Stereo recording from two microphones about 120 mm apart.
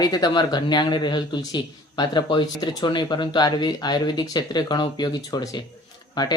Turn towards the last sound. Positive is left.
turn(degrees=40)  # may be behind; listen again after turning